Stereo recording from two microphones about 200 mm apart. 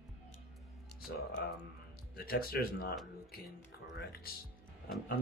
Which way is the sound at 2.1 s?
50° left (ahead or behind).